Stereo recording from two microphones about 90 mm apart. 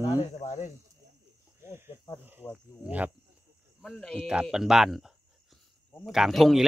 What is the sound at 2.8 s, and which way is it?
Speech, 15° right (ahead or behind).